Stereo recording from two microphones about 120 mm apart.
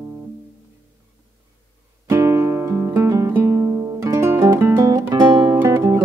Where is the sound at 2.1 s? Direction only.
25° right (ahead or behind).